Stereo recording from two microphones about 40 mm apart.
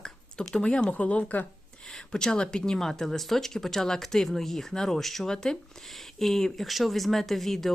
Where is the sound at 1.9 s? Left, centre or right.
Centre.